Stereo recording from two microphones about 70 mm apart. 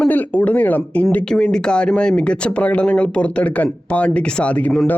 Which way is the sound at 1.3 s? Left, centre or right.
Centre.